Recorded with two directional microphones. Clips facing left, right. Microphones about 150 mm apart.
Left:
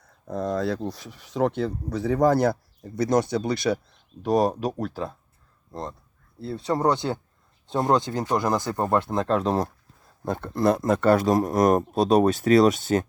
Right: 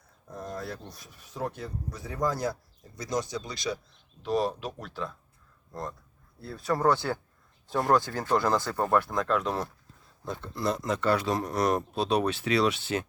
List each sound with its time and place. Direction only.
0.3 s speech: 85° left; by 3.8 s 60° left (ahead or behind)
4.2 s speech: 45° left (ahead or behind)
6.4 s speech: 25° left (ahead or behind)
10.2 s speech: 50° left (ahead or behind)